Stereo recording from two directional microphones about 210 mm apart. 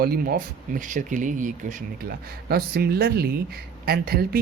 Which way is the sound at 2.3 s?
50° right (ahead or behind).